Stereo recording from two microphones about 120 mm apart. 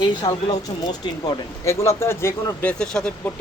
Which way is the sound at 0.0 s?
35° left (ahead or behind).